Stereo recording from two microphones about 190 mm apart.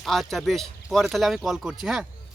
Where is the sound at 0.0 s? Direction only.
Centre (ahead or behind).